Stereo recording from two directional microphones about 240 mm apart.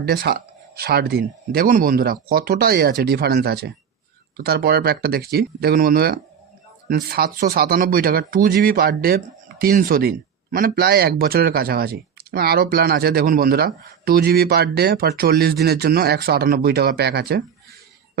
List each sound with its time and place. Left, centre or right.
0.0 s speech: right